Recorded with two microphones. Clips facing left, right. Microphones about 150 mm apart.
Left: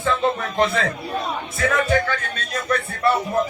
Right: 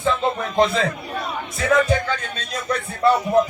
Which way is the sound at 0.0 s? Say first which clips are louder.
Even; 15° right (ahead or behind).